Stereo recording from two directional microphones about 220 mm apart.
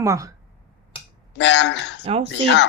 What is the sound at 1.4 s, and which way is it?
Speech, 55° left (ahead or behind).